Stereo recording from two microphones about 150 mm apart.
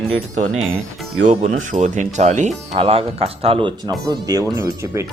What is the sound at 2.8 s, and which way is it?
Speech, 40° right (ahead or behind).